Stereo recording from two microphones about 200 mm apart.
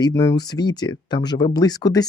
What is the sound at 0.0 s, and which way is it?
Speech, 15° left (ahead or behind).